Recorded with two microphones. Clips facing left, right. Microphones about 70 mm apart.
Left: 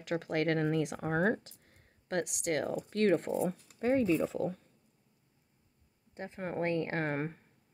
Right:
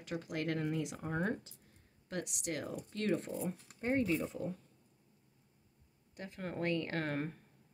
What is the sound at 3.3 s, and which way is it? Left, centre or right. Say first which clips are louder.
Speech: left 7 dB; left.